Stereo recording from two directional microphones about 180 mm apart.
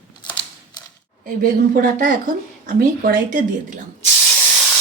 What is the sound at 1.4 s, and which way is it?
Speech, 50° right (ahead or behind).